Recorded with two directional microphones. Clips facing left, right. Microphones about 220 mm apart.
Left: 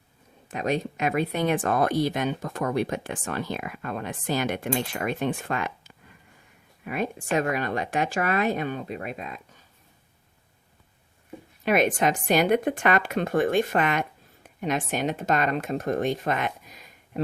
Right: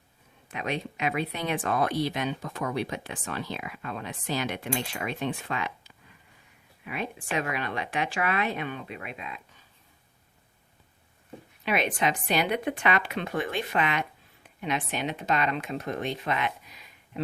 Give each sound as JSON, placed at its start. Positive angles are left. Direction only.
{"t": 0.5, "sound": "speech", "side_deg": 40}
{"t": 11.6, "sound": "speech", "side_deg": 45}